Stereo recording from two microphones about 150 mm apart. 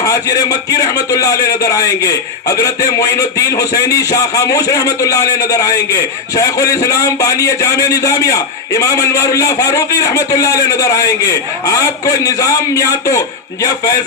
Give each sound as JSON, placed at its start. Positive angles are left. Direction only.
{"t": 0.0, "sound": "speech", "side_deg": 25}